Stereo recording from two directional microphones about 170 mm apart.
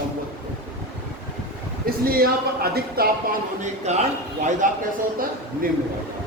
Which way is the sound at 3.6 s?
40° right (ahead or behind).